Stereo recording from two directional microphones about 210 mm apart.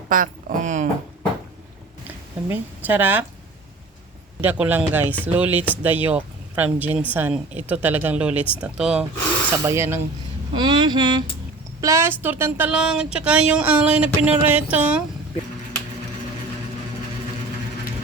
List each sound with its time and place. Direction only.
0.1 s speech: 40° right (ahead or behind)
2.5 s speech: 10° right (ahead or behind)
4.4 s speech: 5° right (ahead or behind)
10.5 s a sound: 20° right (ahead or behind)
11.8 s speech: 15° right (ahead or behind)